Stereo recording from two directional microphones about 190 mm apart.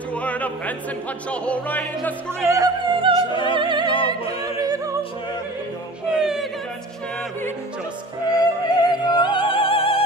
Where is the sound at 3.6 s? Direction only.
25° right (ahead or behind).